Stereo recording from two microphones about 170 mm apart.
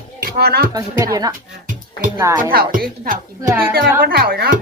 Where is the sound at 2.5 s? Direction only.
60° right (ahead or behind).